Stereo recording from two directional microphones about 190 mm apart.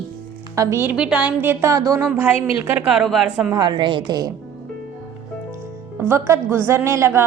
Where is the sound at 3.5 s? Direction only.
20° right (ahead or behind).